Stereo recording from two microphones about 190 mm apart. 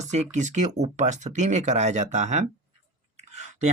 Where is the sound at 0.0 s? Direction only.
35° right (ahead or behind).